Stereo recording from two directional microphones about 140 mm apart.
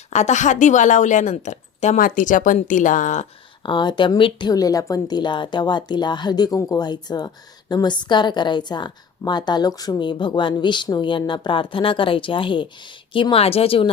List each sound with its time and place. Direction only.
0.1 s a woman's voice: 55° left (ahead or behind)
3.6 s a woman's voice: 35° left (ahead or behind)